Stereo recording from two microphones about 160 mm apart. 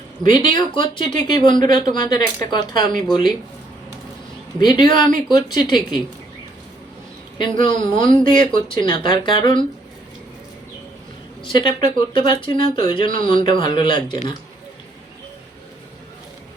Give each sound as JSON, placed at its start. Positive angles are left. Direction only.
{"t": 0.2, "sound": "speech", "side_deg": 30}
{"t": 4.6, "sound": "speech", "side_deg": 25}
{"t": 7.3, "sound": "speech", "side_deg": 30}
{"t": 11.4, "sound": "speech", "side_deg": 30}